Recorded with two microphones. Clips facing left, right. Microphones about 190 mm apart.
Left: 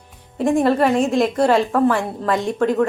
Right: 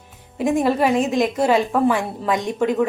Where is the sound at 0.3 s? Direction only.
5° right (ahead or behind).